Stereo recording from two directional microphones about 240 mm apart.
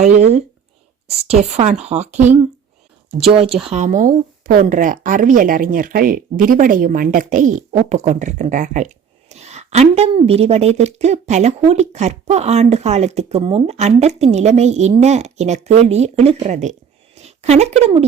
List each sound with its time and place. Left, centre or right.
0.0 s a woman's voice: right
3.7 s a woman's voice: right